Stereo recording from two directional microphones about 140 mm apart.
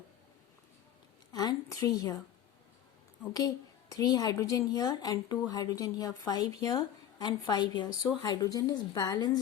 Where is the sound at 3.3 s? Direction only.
25° left (ahead or behind).